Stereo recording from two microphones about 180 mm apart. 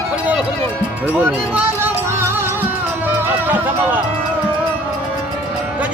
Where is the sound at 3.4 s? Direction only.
10° right (ahead or behind).